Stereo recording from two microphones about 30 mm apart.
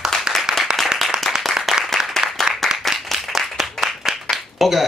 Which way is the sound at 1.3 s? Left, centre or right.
Centre.